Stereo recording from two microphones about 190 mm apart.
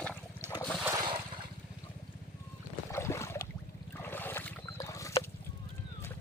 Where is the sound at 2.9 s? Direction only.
15° left (ahead or behind).